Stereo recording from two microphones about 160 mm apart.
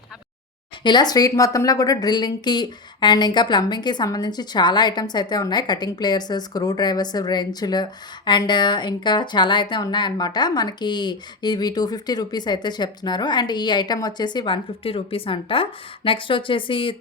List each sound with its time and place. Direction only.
0.9 s a woman's voice: 25° left (ahead or behind)